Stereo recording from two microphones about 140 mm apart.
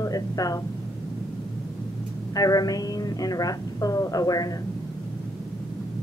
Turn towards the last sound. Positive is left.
turn(degrees=25)  # may be behind; listen again after turning